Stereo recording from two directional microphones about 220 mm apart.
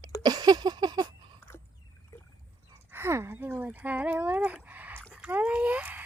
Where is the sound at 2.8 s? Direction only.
10° right (ahead or behind).